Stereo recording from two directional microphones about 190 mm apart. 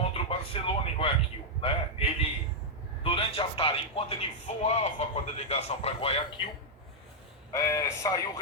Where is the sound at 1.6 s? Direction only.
30° left (ahead or behind).